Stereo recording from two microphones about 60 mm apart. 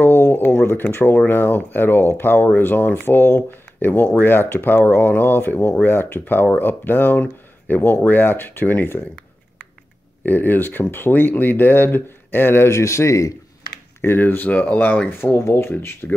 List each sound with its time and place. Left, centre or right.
0.0 s a sound: left
0.9 s speech: left
10.2 s speech: left
14.0 s speech: left
15.3 s speech: left